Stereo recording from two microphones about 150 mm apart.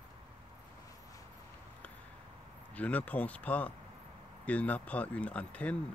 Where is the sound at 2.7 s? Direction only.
10° left (ahead or behind).